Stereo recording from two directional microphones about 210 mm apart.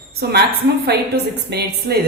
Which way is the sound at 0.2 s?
50° right (ahead or behind).